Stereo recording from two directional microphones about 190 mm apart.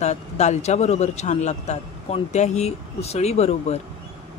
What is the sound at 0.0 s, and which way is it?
A man's voice, 35° left (ahead or behind).